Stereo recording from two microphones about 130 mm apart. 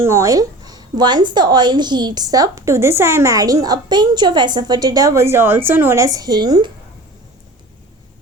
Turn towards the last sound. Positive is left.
turn(degrees=-35)  # may be behind; listen again after turning